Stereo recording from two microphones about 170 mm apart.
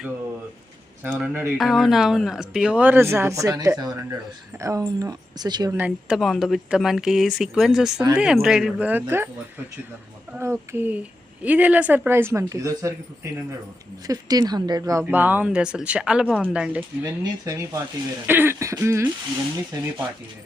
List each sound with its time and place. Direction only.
1.0 s speech: 10° right (ahead or behind)
5.7 s speech: 5° right (ahead or behind)
10.3 s speech: 15° right (ahead or behind)
14.1 s speech: 20° right (ahead or behind); by 16.2 s 5° right (ahead or behind)
16.2 s speech: 5° left (ahead or behind)
16.5 s speech: 5° right (ahead or behind)
17.4 s speech: 20° right (ahead or behind)